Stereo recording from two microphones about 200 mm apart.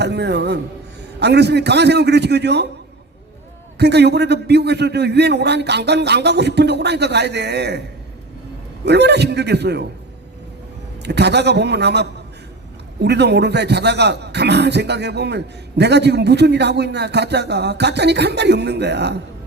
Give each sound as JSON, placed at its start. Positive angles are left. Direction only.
{"t": 0.0, "sound": "a man's voice", "side_deg": -60}
{"t": 3.8, "sound": "a man's voice", "side_deg": -55}
{"t": 8.8, "sound": "a man's voice", "side_deg": -55}
{"t": 11.0, "sound": "a man's voice", "side_deg": -55}